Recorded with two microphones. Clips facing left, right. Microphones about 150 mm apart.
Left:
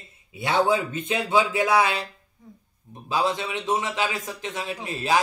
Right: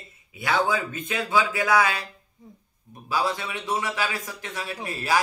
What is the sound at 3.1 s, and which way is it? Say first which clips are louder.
A man's voice: left 2 dB; 20° left (ahead or behind).